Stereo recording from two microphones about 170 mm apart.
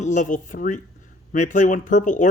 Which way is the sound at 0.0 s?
45° left (ahead or behind).